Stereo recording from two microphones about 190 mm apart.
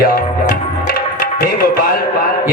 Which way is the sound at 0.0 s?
50° left (ahead or behind).